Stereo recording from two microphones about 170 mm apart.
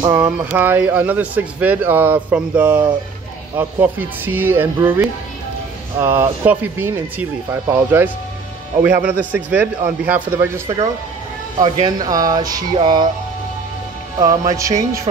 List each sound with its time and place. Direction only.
0.0 s speech: 15° right (ahead or behind)
11.5 s speech: 25° right (ahead or behind)
14.1 s speech: 20° right (ahead or behind)